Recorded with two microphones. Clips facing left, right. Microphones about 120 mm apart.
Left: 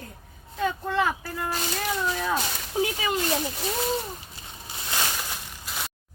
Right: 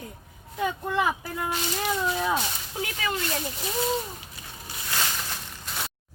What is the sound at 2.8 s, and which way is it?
Speech, 20° left (ahead or behind).